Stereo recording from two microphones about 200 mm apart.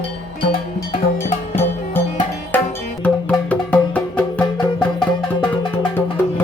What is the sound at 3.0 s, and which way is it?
Music, 5° left (ahead or behind).